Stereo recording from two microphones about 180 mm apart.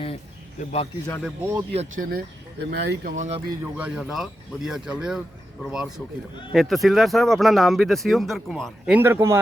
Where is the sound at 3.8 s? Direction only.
5° right (ahead or behind).